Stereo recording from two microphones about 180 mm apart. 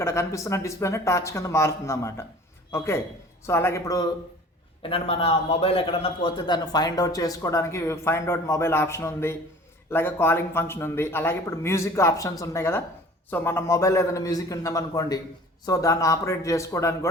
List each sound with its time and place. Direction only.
0.0 s a man's voice: 15° left (ahead or behind)
4.8 s a man's voice: 30° left (ahead or behind); by 17.1 s 15° left (ahead or behind)